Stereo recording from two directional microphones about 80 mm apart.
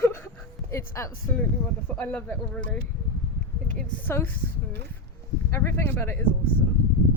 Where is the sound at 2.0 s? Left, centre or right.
Centre.